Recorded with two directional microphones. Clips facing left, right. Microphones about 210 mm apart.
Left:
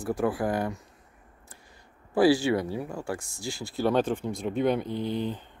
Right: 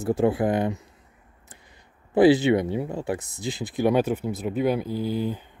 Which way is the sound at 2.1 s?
20° right (ahead or behind).